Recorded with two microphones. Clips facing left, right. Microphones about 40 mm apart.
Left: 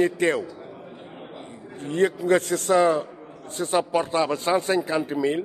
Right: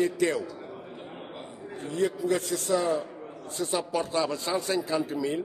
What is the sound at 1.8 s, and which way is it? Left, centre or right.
A man's voice, left.